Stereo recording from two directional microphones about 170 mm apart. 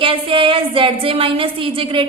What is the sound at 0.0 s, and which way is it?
A woman's voice, 30° right (ahead or behind).